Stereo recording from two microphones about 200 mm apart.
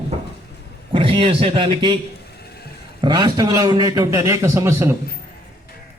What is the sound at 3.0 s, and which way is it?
A man's voice, 20° right (ahead or behind).